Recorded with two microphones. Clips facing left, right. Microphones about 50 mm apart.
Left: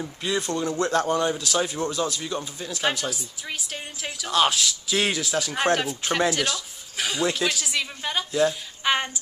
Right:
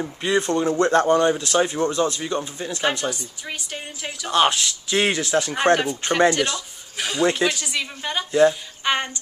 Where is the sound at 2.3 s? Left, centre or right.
Centre.